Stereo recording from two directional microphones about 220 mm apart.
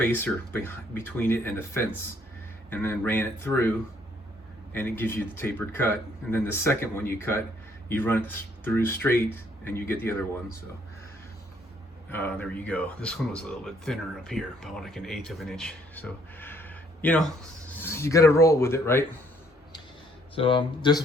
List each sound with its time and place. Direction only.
0.0 s speech: 10° left (ahead or behind)
12.1 s speech: 10° left (ahead or behind)
20.3 s speech: 25° left (ahead or behind)